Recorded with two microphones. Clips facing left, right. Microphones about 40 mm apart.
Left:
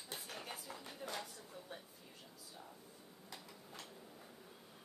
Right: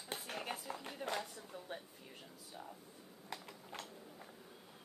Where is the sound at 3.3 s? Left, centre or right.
Right.